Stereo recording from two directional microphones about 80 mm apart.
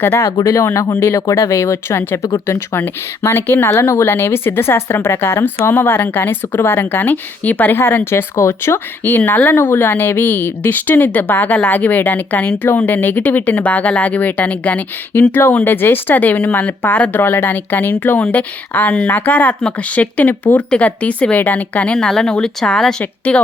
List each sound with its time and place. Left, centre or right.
0.0 s a woman's voice: left
21.9 s a woman's voice: centre